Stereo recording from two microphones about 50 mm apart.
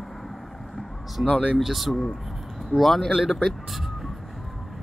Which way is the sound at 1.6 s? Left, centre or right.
Centre.